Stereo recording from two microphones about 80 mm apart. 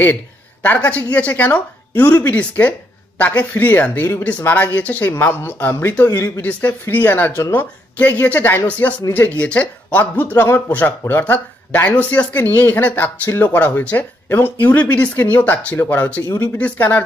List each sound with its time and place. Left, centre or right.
0.0 s speech: left
5.1 s speech: left
6.4 s speech: left